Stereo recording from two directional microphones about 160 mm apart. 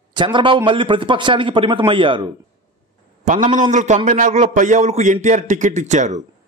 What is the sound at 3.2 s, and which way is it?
A man's voice, 50° right (ahead or behind).